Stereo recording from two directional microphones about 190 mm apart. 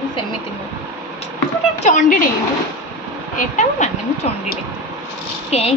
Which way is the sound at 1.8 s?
45° left (ahead or behind).